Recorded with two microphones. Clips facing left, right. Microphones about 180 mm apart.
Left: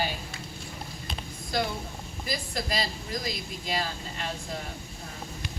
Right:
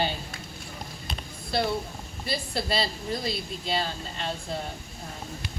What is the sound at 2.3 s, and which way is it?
Speech, 30° right (ahead or behind).